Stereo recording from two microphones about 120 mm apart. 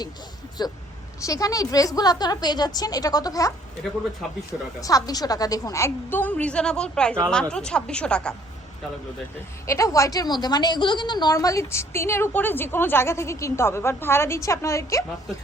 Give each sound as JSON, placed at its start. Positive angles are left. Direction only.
{"t": 0.6, "sound": "a woman's voice", "side_deg": 35}
{"t": 4.8, "sound": "a woman's voice", "side_deg": 30}
{"t": 9.6, "sound": "a woman's voice", "side_deg": 25}